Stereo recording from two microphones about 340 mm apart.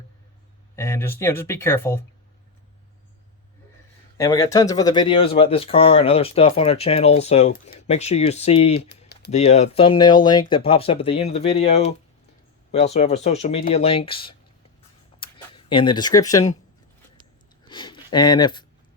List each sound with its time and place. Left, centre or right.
0.8 s speech: centre
4.2 s speech: centre
8.9 s typing: left
9.4 s speech: centre
17.7 s speech: centre